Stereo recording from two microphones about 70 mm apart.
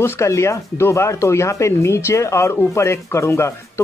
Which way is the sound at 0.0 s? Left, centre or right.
Left.